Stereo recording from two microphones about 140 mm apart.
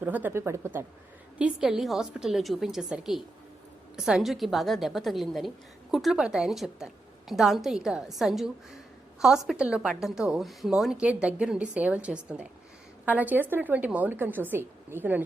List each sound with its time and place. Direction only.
0.0 s a woman's voice: 15° right (ahead or behind)
1.4 s a woman's voice: 5° right (ahead or behind)